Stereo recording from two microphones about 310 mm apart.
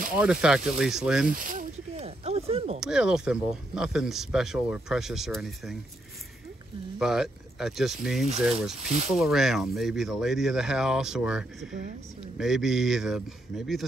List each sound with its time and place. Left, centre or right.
0.1 s speech: centre
1.2 s a sound: right
2.8 s speech: centre
7.0 s speech: centre